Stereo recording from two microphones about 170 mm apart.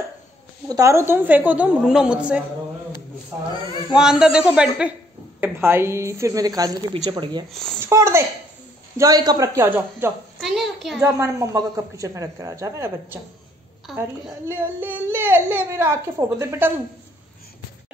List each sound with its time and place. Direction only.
0.7 s speech: 20° right (ahead or behind)
3.9 s a woman's voice: 5° right (ahead or behind); by 7.4 s 25° right (ahead or behind)
7.5 s speech: 5° left (ahead or behind)
7.8 s a woman's voice: 15° right (ahead or behind)
10.4 s a sound: centre (ahead or behind)
11.0 s speech: 15° right (ahead or behind)
13.8 s speech: centre (ahead or behind)
14.4 s speech: 15° right (ahead or behind)